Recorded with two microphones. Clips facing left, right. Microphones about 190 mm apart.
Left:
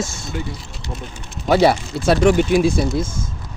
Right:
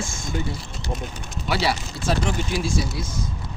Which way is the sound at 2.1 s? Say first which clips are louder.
Left 10 dB; 70° left (ahead or behind).